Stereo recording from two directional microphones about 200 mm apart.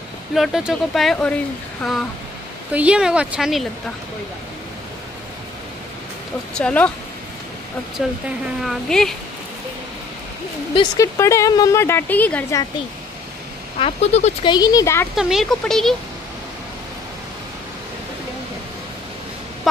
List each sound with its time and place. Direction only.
0.3 s speech: centre (ahead or behind)
6.5 s speech: 5° left (ahead or behind)
8.0 s speech: centre (ahead or behind)
10.7 s speech: 20° left (ahead or behind)
13.7 s speech: 30° left (ahead or behind)
14.5 s speech: 20° left (ahead or behind)
15.1 s speech: centre (ahead or behind)